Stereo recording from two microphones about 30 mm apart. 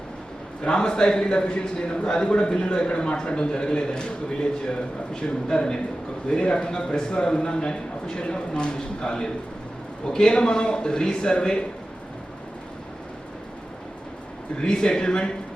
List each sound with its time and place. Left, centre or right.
0.6 s a man's voice: left
14.6 s a man's voice: left